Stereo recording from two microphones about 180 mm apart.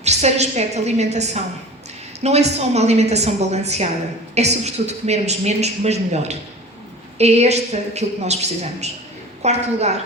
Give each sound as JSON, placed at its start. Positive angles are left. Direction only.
{"t": 0.0, "sound": "a woman's voice", "side_deg": -40}